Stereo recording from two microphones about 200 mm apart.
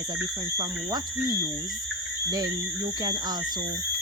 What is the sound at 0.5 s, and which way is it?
Speech, 20° right (ahead or behind).